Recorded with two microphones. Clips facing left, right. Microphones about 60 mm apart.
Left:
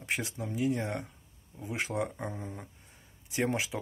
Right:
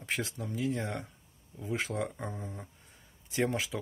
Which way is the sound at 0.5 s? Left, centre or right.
Centre.